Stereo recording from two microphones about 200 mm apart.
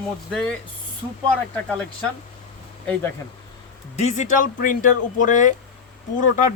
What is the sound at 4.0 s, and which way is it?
Speech, 35° left (ahead or behind).